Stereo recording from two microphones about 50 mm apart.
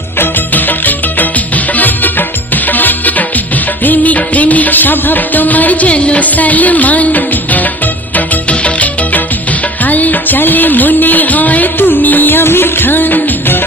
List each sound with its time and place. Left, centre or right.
0.2 s music: left